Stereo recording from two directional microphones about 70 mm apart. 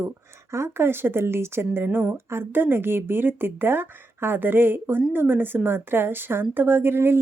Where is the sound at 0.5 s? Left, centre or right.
Right.